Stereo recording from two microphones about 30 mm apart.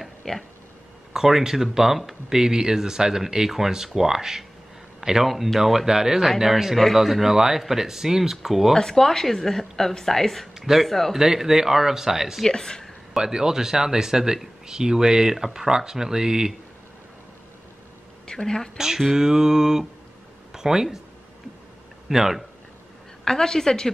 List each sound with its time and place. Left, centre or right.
0.2 s speech: centre
1.1 s speech: centre
8.7 s a woman's voice: centre
10.6 s speech: centre
11.1 s speech: centre
12.4 s speech: left
13.2 s speech: right
18.2 s a woman's voice: left
18.8 s speech: centre
22.1 s speech: centre
23.2 s a woman's voice: centre